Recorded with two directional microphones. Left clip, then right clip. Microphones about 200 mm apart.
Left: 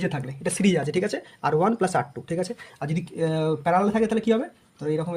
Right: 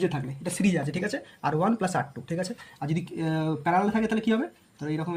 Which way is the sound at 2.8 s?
50° left (ahead or behind).